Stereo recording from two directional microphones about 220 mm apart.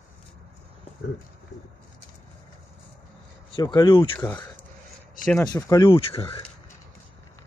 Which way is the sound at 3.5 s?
20° left (ahead or behind).